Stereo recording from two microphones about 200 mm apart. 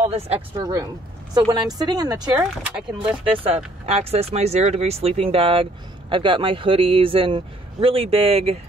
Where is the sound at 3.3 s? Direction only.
25° right (ahead or behind).